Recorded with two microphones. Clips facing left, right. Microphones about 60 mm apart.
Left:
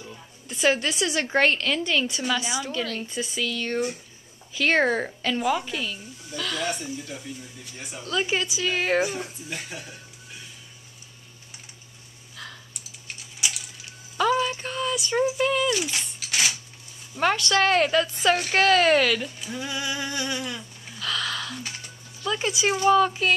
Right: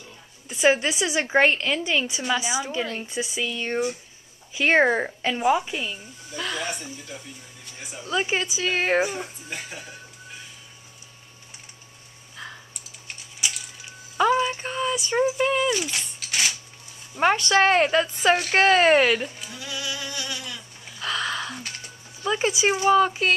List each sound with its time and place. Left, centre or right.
0.5 s a woman's voice: centre
6.6 s speech: centre
8.0 s a woman's voice: centre
9.0 s speech: centre
13.1 s typing: centre
14.1 s a sound: centre
15.0 s a woman's voice: centre
15.7 s a sound: centre
17.2 s speech: centre
19.5 s a sound: left
21.0 s a sound: right
22.7 s speech: centre